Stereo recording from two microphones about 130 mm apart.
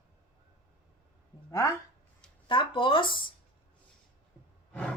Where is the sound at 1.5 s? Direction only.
25° left (ahead or behind).